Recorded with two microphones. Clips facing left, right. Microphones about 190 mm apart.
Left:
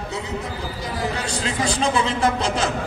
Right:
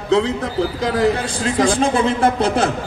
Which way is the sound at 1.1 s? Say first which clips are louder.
Right 6 dB; 50° right (ahead or behind).